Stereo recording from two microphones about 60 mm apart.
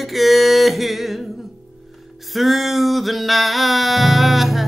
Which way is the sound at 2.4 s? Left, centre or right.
Centre.